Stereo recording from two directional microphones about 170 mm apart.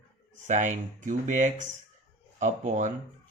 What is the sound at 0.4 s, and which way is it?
Speech, 45° right (ahead or behind).